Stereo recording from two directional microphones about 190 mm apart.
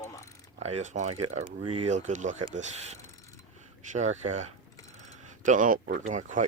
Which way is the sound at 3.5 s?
40° right (ahead or behind).